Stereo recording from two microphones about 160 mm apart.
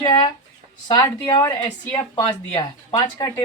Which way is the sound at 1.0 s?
15° left (ahead or behind).